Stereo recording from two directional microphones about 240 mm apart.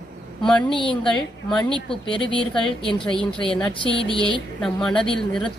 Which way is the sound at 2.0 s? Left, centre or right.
Left.